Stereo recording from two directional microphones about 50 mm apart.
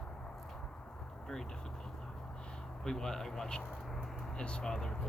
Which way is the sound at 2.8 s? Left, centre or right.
Centre.